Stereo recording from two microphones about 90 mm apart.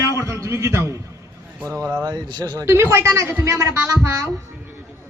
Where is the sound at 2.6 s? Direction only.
30° right (ahead or behind).